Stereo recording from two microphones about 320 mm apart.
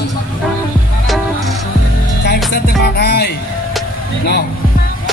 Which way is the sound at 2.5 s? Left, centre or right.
Left.